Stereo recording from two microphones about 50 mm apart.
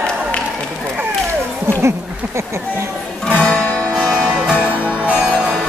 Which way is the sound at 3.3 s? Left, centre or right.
Left.